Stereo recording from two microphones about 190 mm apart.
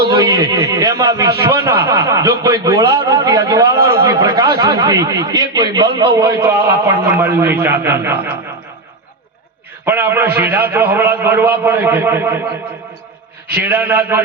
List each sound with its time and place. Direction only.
0.1 s a man's voice: 20° right (ahead or behind)
9.8 s a man's voice: 10° right (ahead or behind)
13.5 s a man's voice: 10° right (ahead or behind)